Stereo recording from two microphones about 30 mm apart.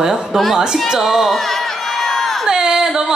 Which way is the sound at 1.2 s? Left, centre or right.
Centre.